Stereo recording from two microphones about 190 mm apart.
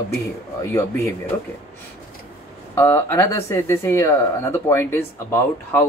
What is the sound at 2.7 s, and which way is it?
Speech, 10° left (ahead or behind).